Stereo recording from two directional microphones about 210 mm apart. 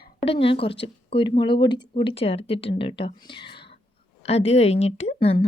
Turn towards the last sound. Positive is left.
turn(degrees=30)  # may be behind; listen again after turning